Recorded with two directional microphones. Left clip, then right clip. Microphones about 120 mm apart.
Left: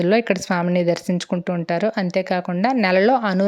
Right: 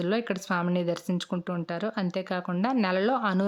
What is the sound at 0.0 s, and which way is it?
A woman's voice, 30° left (ahead or behind).